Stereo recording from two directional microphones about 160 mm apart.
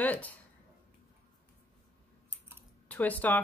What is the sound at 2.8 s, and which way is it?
Speech, 10° left (ahead or behind).